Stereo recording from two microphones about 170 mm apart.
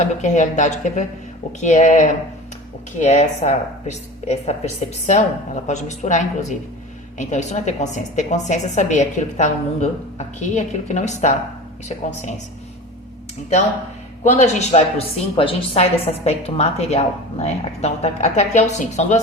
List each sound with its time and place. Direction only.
0.0 s a woman's voice: 45° left (ahead or behind)
14.3 s a woman's voice: 40° left (ahead or behind)